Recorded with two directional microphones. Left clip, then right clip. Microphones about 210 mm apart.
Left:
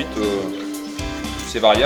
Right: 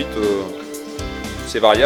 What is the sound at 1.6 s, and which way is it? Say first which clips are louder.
Speech: right 1 dB; 50° right (ahead or behind).